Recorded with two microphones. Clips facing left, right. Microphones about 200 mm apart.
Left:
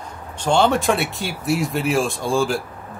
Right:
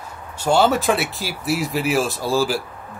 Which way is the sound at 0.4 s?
5° right (ahead or behind).